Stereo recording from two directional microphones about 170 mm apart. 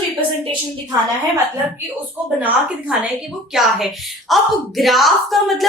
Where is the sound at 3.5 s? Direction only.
Centre (ahead or behind).